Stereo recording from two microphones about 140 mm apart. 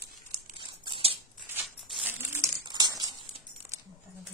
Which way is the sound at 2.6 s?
30° right (ahead or behind).